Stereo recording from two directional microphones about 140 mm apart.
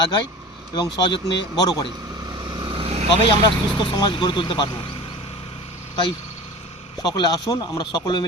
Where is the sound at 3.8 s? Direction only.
30° left (ahead or behind).